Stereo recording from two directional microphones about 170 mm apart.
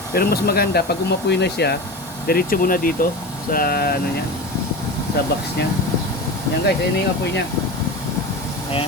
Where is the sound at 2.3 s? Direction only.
60° left (ahead or behind).